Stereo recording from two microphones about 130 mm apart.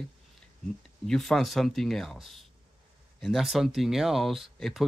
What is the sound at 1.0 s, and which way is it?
Speech, 5° left (ahead or behind).